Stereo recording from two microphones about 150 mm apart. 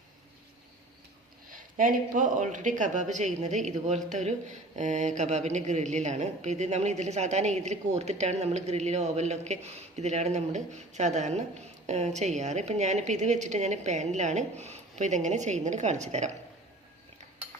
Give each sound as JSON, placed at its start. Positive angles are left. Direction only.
{"t": 1.5, "sound": "speech", "side_deg": -65}